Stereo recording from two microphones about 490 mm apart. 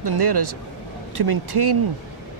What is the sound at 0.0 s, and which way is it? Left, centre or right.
Speech, right.